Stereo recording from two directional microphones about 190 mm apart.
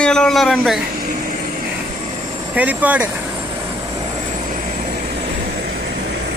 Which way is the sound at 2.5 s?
10° right (ahead or behind).